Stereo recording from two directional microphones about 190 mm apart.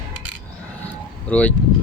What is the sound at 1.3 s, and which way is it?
Speech, 5° left (ahead or behind).